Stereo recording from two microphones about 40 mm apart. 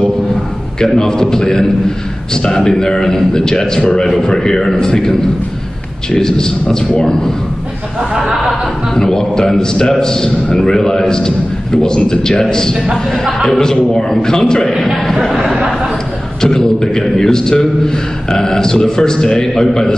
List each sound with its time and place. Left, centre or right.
0.7 s a man's voice: centre
6.1 s a man's voice: centre
8.2 s a sound: centre
8.9 s a man's voice: centre
12.9 s speech: centre
13.5 s a man's voice: centre
15.2 s speech: centre
16.3 s a man's voice: centre